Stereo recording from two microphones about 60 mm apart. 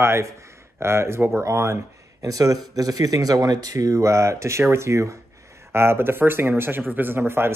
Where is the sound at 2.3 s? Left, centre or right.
Right.